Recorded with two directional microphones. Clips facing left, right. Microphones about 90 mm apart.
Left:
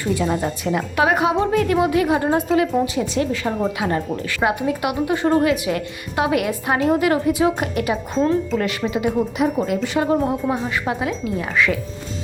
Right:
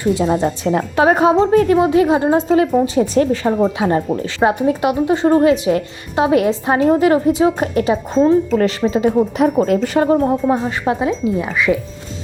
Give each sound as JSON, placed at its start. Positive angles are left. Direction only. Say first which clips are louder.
{"t": 0.0, "sound": "speech", "louder": "right 5 dB", "side_deg": -20}
{"t": 3.4, "sound": "speech", "louder": "right 6 dB", "side_deg": -25}
{"t": 9.6, "sound": "speech", "louder": "right 6 dB", "side_deg": -45}
{"t": 10.5, "sound": "speech", "louder": "right 5 dB", "side_deg": -25}